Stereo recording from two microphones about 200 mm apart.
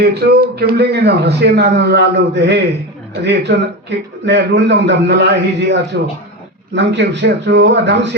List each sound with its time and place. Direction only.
0.0 s a man's voice: 55° right (ahead or behind)